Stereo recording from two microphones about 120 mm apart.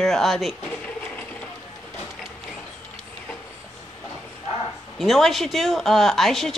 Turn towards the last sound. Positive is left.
turn(degrees=0)  # may be behind; listen again after turning